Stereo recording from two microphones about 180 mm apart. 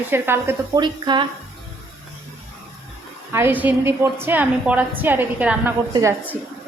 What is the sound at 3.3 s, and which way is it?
A woman's voice, 10° right (ahead or behind).